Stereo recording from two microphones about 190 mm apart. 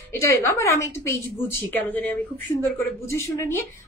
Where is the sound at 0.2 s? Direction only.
15° left (ahead or behind).